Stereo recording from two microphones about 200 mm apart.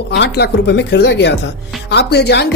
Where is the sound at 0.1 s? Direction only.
55° left (ahead or behind).